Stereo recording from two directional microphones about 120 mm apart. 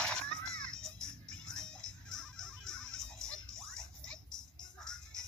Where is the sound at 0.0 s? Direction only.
5° left (ahead or behind).